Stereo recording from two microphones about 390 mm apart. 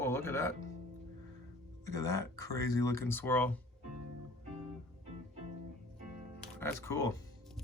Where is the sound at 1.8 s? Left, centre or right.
Centre.